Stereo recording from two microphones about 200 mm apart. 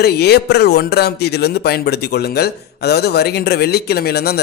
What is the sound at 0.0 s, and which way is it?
A man's voice, 55° left (ahead or behind).